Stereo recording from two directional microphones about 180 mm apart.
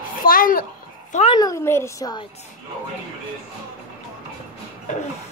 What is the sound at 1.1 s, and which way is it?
Speech, 35° left (ahead or behind).